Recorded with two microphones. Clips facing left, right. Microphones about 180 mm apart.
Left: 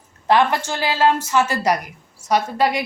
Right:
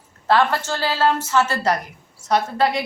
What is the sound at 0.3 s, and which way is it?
Speech, 15° left (ahead or behind).